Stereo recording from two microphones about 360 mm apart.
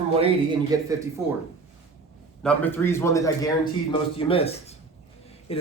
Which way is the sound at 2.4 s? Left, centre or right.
Centre.